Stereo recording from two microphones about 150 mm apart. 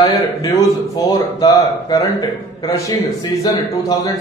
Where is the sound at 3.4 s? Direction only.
25° left (ahead or behind).